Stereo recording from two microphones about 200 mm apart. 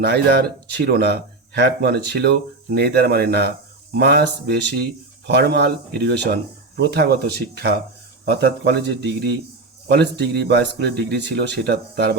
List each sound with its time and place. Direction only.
0.0 s speech: 55° right (ahead or behind)